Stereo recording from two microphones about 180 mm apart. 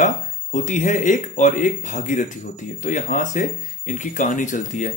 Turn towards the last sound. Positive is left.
turn(degrees=45)  # may be behind; listen again after turning